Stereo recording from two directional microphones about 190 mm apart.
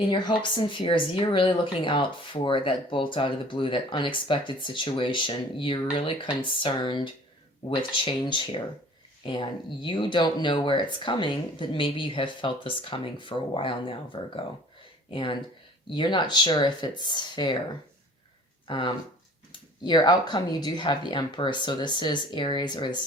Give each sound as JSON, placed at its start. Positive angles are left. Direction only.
{"t": 0.1, "sound": "speech", "side_deg": 25}
{"t": 18.7, "sound": "speech", "side_deg": 25}